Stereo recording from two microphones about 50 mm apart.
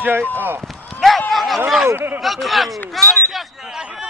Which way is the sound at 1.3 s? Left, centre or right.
Centre.